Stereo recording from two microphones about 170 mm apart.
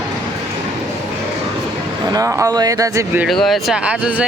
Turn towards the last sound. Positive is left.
turn(degrees=-5)  # may be behind; listen again after turning